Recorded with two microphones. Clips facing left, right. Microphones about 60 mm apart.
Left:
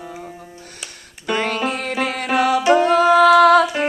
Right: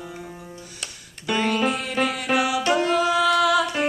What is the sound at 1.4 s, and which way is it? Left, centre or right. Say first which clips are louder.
Music: left 1 dB; left.